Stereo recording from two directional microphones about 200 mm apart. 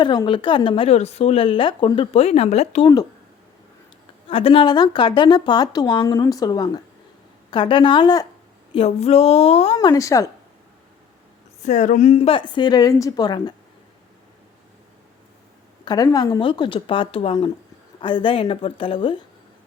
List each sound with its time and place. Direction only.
0.0 s a woman's voice: 20° left (ahead or behind)
4.3 s a woman's voice: 25° left (ahead or behind)
8.7 s speech: 30° left (ahead or behind)
9.7 s speech: 15° left (ahead or behind)
11.6 s a woman's voice: 35° left (ahead or behind); by 13.5 s 20° left (ahead or behind)
15.8 s a sound: 20° left (ahead or behind)
16.1 s a woman's voice: 20° left (ahead or behind)